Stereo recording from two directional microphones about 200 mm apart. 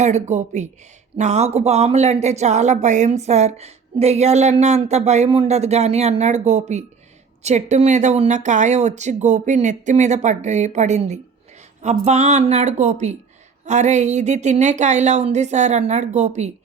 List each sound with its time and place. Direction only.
0.0 s speech: 35° right (ahead or behind)